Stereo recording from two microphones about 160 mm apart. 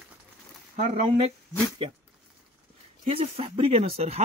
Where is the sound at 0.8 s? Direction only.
40° right (ahead or behind).